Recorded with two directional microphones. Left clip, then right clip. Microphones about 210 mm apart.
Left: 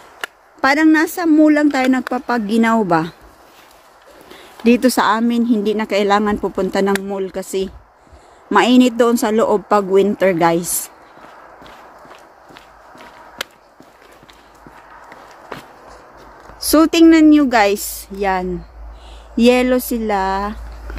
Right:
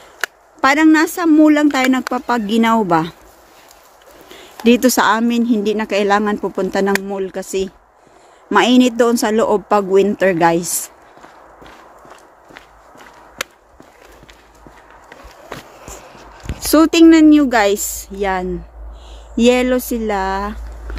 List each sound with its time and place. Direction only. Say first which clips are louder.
0.6 s a woman's voice: right 1 dB; 5° right (ahead or behind)
4.6 s speech: right 1 dB; 10° right (ahead or behind)
8.5 s speech: even; 5° right (ahead or behind)
13.4 s a sound: right 2 dB; 20° right (ahead or behind)
16.6 s speech: right 1 dB; 5° right (ahead or behind)